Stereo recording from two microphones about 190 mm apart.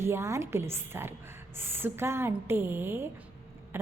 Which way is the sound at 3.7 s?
10° right (ahead or behind).